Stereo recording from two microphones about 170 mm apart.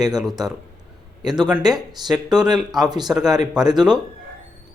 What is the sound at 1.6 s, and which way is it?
Speech, 25° right (ahead or behind).